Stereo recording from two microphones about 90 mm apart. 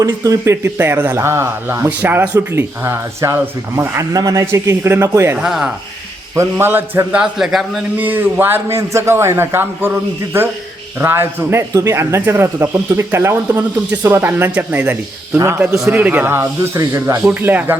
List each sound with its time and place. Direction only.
0.0 s speech: 35° right (ahead or behind)
1.1 s a man's voice: 30° right (ahead or behind)
5.4 s speech: 5° right (ahead or behind)
6.3 s speech: 30° right (ahead or behind)
7.2 s a man's voice: 5° right (ahead or behind)
7.9 s a man's voice: 20° right (ahead or behind)
15.4 s speech: 30° right (ahead or behind)
15.9 s speech: 20° right (ahead or behind)
16.8 s a man's voice: 35° right (ahead or behind)
17.2 s speech: 20° right (ahead or behind)